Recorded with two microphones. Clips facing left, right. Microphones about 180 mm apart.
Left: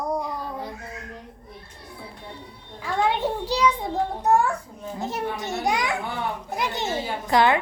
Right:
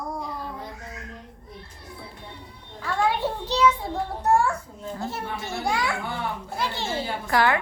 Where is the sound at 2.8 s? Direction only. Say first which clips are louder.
Left 1 dB; 20° left (ahead or behind).